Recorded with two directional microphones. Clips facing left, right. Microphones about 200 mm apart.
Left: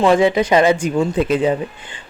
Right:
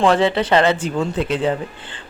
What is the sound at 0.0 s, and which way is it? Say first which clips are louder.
Speech: left 2 dB; 10° left (ahead or behind).